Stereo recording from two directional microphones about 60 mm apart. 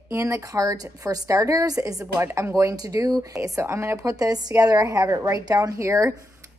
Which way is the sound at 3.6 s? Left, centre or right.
Right.